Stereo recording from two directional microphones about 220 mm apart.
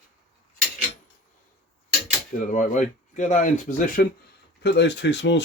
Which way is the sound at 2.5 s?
35° left (ahead or behind).